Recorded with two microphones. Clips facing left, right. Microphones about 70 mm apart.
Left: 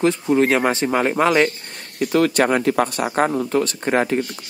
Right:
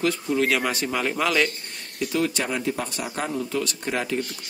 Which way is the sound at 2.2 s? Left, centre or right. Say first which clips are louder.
Left 10 dB; left.